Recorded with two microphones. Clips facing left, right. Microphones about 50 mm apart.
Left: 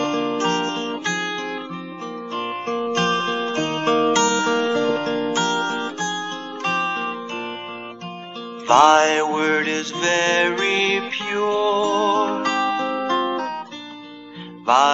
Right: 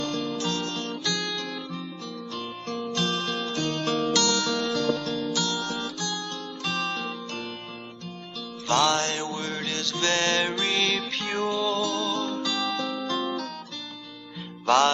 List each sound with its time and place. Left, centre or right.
0.0 s music: left
8.6 s music: left
14.7 s music: left